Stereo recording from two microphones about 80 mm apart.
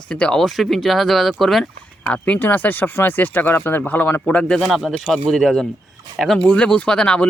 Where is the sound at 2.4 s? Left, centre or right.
Left.